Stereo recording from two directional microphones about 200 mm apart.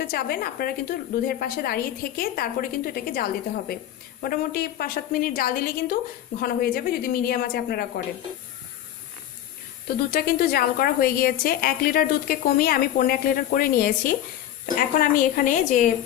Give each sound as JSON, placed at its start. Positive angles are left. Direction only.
{"t": 0.0, "sound": "a woman's voice", "side_deg": 50}
{"t": 10.1, "sound": "a woman's voice", "side_deg": 50}